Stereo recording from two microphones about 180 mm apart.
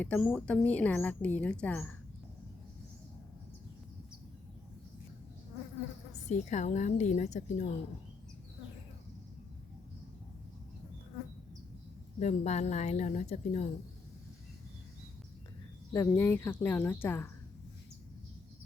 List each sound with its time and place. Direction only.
0.0 s speech: 5° left (ahead or behind)
6.2 s a woman's voice: 40° left (ahead or behind)
12.2 s a woman's voice: 35° left (ahead or behind)
15.9 s speech: 15° left (ahead or behind)